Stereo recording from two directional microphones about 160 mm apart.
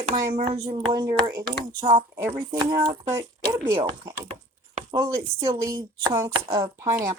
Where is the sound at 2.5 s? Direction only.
30° right (ahead or behind).